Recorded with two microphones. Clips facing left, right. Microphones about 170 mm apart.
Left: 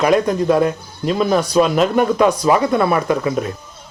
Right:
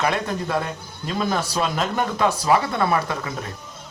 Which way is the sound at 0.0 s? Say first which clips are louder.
Left 9 dB; 15° left (ahead or behind).